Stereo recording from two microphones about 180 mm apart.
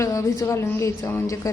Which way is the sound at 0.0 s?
15° left (ahead or behind).